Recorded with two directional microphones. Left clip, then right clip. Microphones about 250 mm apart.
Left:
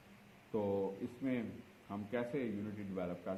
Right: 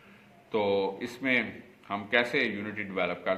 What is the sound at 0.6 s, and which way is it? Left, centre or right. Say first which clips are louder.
Speech: right 10 dB; right.